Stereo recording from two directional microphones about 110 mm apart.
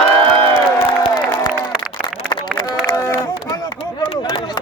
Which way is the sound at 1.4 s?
40° left (ahead or behind).